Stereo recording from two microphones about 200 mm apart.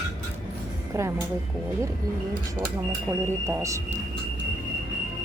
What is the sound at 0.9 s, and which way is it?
Speech, 15° right (ahead or behind).